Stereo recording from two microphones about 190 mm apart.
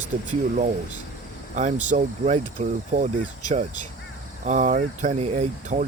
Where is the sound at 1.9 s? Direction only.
40° right (ahead or behind).